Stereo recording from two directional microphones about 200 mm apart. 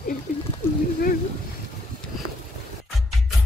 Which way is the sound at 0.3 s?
40° left (ahead or behind).